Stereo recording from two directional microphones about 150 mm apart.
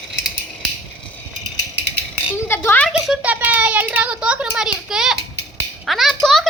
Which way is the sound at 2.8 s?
5° right (ahead or behind).